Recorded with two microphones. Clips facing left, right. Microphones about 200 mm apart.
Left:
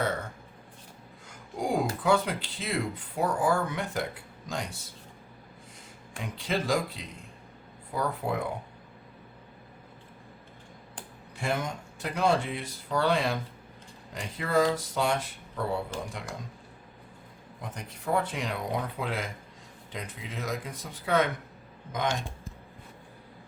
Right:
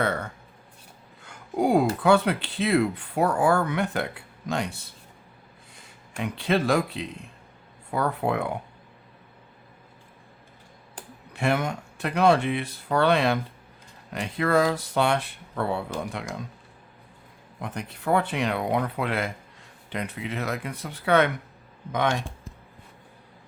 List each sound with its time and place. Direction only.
0.0 s a sound: 65° right (ahead or behind)
1.2 s speech: 65° right (ahead or behind)
11.3 s speech: 70° right (ahead or behind)
17.6 s speech: 65° right (ahead or behind)